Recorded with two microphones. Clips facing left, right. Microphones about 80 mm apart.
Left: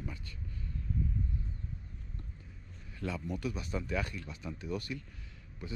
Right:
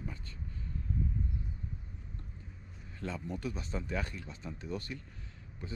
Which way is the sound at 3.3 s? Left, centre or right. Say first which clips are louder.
Left 2 dB; right.